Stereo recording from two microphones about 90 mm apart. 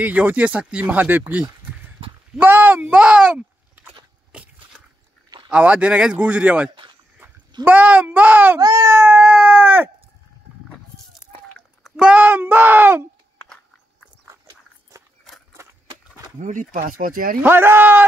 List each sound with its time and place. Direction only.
0.0 s speech: 15° right (ahead or behind)
4.3 s a sound: 10° right (ahead or behind)
5.5 s speech: 15° right (ahead or behind)
8.5 s baby cry: 40° right (ahead or behind)
9.2 s a sound: 15° right (ahead or behind)
12.0 s speech: 15° right (ahead or behind)
17.5 s speech: 25° right (ahead or behind)